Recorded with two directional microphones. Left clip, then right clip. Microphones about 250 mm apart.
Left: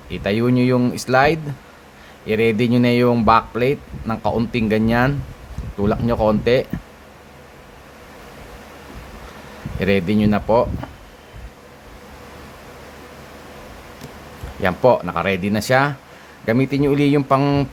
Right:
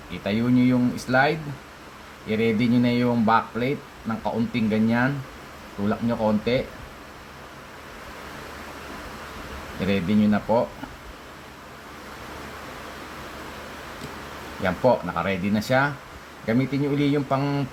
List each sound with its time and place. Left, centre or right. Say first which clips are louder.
0.1 s speech: left 5 dB; left
9.8 s speech: left 6 dB; left
14.6 s speech: left 6 dB; left